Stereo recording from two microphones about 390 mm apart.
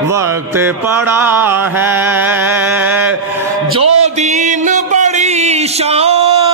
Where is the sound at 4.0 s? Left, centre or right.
Centre.